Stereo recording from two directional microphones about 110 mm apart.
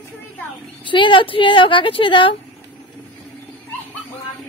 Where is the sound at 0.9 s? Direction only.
50° left (ahead or behind).